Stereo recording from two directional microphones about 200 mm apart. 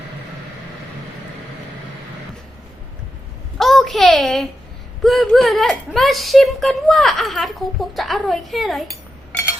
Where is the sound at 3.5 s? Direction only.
Centre (ahead or behind).